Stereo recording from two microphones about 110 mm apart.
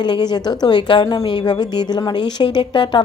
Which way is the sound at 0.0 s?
40° left (ahead or behind).